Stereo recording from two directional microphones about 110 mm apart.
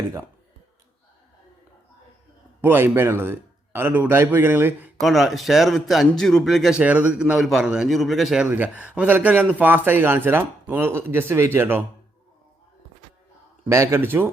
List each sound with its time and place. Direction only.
2.6 s a man's voice: 20° right (ahead or behind)
4.9 s speech: centre (ahead or behind)
6.7 s a man's voice: 10° right (ahead or behind)
8.4 s a man's voice: 15° right (ahead or behind)
13.7 s a man's voice: 25° right (ahead or behind)